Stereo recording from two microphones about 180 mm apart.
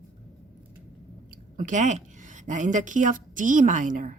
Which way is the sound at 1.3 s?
45° right (ahead or behind).